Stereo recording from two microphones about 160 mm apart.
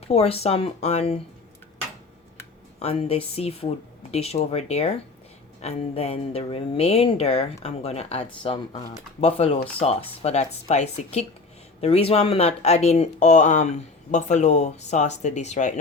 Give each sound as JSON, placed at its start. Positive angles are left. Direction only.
{"t": 0.0, "sound": "speech", "side_deg": 40}
{"t": 2.7, "sound": "speech", "side_deg": 40}